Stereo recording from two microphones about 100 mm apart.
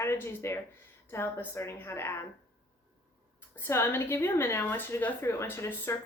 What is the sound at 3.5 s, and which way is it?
A woman's voice, 25° left (ahead or behind).